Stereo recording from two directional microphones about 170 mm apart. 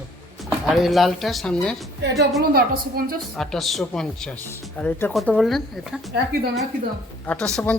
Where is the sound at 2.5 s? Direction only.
60° right (ahead or behind).